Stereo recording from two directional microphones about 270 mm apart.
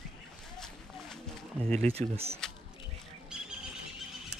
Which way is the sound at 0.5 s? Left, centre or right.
Centre.